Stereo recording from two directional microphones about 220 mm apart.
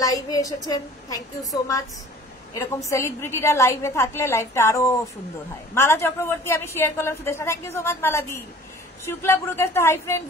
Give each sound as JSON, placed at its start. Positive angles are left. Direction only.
{"t": 0.0, "sound": "a woman's voice", "side_deg": 15}